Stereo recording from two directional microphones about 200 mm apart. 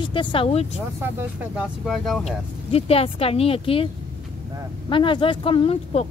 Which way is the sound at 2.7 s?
30° left (ahead or behind).